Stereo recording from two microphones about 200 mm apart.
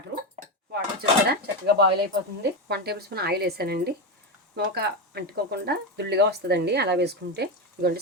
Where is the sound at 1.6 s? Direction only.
55° right (ahead or behind).